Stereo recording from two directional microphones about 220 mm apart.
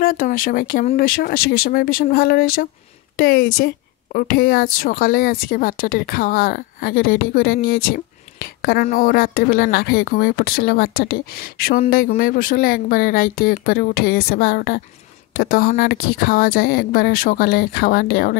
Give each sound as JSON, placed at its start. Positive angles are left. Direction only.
{"t": 0.0, "sound": "a woman's voice", "side_deg": 40}